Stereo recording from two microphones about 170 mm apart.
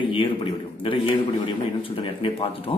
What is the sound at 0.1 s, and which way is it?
A man's voice, 30° left (ahead or behind).